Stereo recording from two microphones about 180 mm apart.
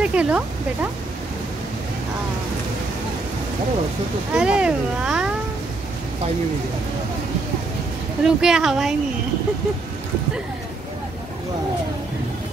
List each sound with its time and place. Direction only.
0.0 s a sound: 5° right (ahead or behind)
4.3 s speech: 5° right (ahead or behind)
8.2 s speech: 5° right (ahead or behind)